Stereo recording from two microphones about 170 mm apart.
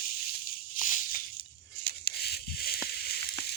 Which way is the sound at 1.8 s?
65° left (ahead or behind).